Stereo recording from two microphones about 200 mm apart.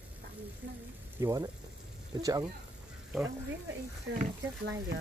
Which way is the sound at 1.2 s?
20° right (ahead or behind).